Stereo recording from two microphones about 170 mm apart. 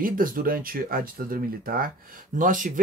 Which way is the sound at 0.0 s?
55° right (ahead or behind).